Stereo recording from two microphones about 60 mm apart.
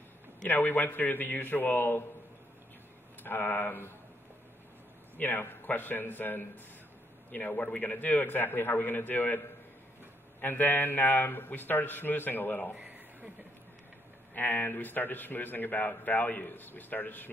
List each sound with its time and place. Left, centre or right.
0.5 s a man's voice: left
3.3 s a man's voice: left
5.1 s a man's voice: left
10.4 s a man's voice: left
12.7 s a sound: right
14.3 s a man's voice: left